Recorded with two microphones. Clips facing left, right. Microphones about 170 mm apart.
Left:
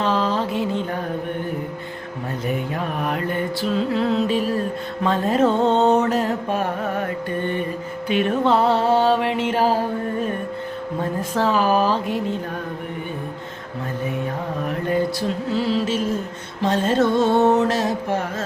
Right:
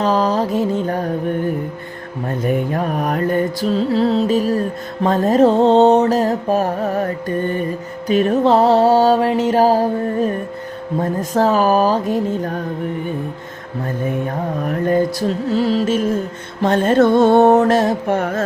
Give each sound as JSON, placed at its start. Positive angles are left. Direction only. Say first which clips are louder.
{"t": 0.0, "sound": "mantra", "louder": "right 4 dB", "side_deg": -40}
{"t": 2.4, "sound": "mantra", "louder": "right 6 dB", "side_deg": -45}
{"t": 11.0, "sound": "mantra", "louder": "right 5 dB", "side_deg": -45}
{"t": 14.7, "sound": "mantra", "louder": "right 5 dB", "side_deg": -45}
{"t": 16.6, "sound": "a sound", "louder": "right 5 dB", "side_deg": -55}